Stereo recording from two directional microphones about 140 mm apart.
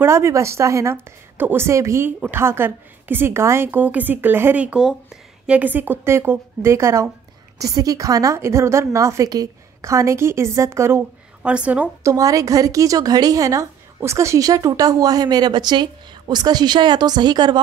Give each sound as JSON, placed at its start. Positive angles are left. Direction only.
{"t": 0.0, "sound": "a woman's voice", "side_deg": -20}
{"t": 11.4, "sound": "a woman's voice", "side_deg": -10}
{"t": 12.0, "sound": "a woman's voice", "side_deg": -25}